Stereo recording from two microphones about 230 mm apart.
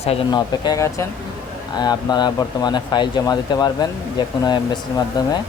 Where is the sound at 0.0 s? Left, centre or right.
Left.